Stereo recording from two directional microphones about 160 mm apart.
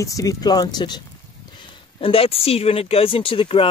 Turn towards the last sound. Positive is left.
turn(degrees=35)  # may be behind; listen again after turning